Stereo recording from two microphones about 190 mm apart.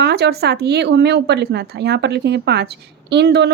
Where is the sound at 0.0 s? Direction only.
60° right (ahead or behind).